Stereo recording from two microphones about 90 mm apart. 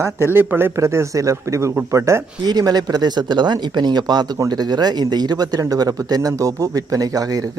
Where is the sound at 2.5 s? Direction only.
45° right (ahead or behind).